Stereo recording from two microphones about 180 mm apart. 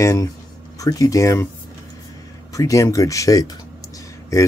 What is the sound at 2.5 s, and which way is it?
Speech, 15° left (ahead or behind).